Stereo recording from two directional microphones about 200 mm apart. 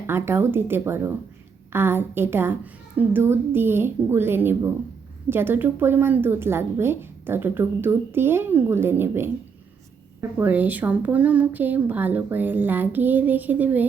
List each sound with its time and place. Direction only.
0.1 s a woman's voice: 10° right (ahead or behind)